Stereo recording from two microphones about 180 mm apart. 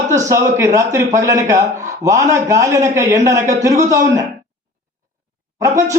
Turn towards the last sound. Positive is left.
turn(degrees=-15)  # may be behind; listen again after turning